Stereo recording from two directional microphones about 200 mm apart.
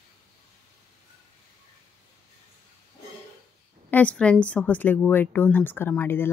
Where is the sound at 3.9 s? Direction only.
5° left (ahead or behind).